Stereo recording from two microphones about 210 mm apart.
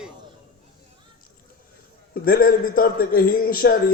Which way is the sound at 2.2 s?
45° left (ahead or behind).